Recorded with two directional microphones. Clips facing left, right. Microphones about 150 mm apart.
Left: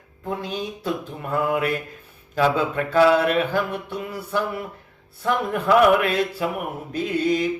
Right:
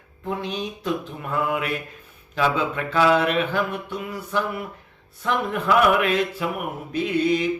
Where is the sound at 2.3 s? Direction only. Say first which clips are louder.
Left 2 dB; 40° left (ahead or behind).